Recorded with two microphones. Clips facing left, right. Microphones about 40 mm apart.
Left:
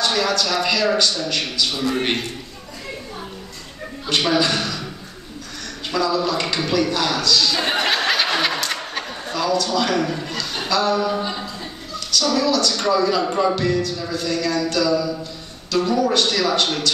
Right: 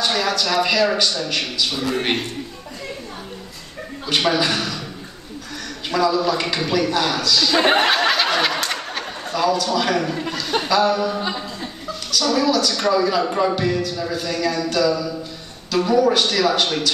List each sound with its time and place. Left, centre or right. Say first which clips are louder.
0.0 s a man's voice: even; centre
4.1 s a man's voice: even; centre
5.9 s a man's voice: right 2 dB; centre
7.8 s a sound: right 2 dB; centre
10.0 s a man's voice: right 1 dB; centre
12.1 s a man's voice: right 1 dB; centre